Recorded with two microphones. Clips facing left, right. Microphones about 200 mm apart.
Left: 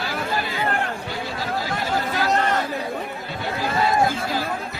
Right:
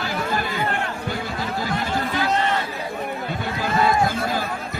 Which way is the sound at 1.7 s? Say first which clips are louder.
Right 1 dB; 45° left (ahead or behind).